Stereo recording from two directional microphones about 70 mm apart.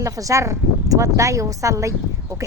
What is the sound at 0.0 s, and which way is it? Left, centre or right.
Speech, right.